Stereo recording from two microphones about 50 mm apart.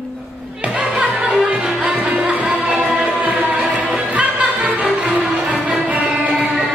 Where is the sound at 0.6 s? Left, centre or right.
Right.